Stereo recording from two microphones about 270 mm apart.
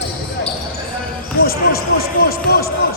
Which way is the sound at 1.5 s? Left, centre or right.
Left.